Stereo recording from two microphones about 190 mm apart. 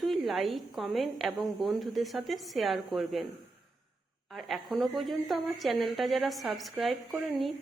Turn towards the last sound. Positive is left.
turn(degrees=0)  # may be behind; listen again after turning